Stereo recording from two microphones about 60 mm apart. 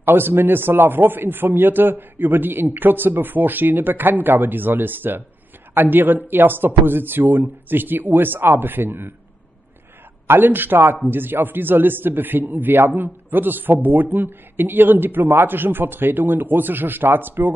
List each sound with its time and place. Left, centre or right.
0.0 s a man's voice: right
10.2 s a man's voice: right